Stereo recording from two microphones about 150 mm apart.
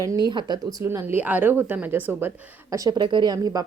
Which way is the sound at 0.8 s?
15° right (ahead or behind).